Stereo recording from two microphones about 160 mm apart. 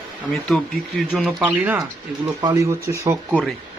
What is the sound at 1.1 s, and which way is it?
Speech, centre (ahead or behind).